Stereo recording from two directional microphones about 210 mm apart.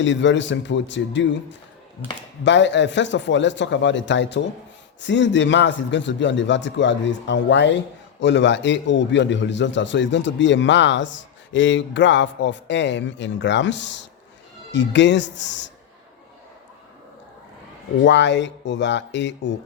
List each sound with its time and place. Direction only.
0.0 s a man's voice: 60° left (ahead or behind)
18.0 s a man's voice: 55° left (ahead or behind)